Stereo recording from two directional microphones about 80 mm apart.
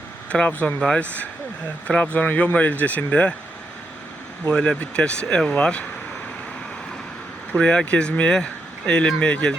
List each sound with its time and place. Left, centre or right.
0.3 s speech: centre
4.5 s speech: centre
7.5 s speech: centre